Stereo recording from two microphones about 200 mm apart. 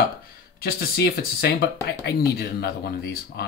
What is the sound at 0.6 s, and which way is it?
Speech, 50° left (ahead or behind).